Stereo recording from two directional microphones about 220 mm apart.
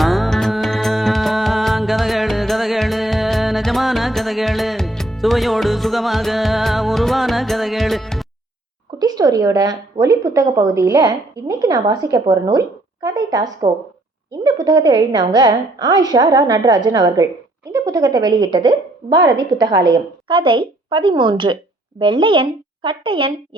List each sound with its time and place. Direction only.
0.0 s music: centre (ahead or behind)
9.0 s a woman's voice: 15° right (ahead or behind)